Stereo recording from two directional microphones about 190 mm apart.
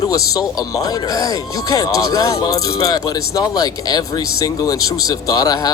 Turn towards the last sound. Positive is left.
turn(degrees=20)  # may be behind; listen again after turning